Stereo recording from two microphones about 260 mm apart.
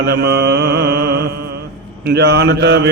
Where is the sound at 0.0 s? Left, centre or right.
Right.